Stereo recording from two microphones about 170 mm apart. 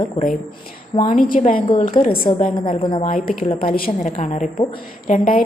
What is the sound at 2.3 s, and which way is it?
Speech, 30° left (ahead or behind).